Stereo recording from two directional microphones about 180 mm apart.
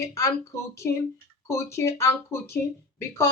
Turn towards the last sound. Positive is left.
turn(degrees=15)  # may be behind; listen again after turning